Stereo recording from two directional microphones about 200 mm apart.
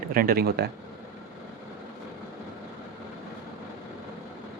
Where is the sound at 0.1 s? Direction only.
45° right (ahead or behind).